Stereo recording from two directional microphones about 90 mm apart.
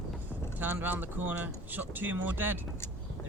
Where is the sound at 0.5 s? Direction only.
20° right (ahead or behind).